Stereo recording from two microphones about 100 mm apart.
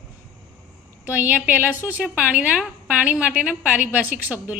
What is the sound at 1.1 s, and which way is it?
A woman's voice, 15° right (ahead or behind).